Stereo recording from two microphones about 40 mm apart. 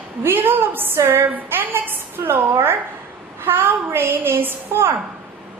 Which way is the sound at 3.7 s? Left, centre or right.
Right.